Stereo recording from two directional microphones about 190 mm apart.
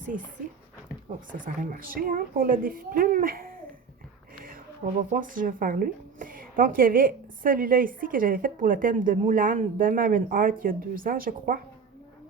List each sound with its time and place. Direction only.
1.3 s a woman's voice: 45° right (ahead or behind)
4.9 s a woman's voice: 45° right (ahead or behind)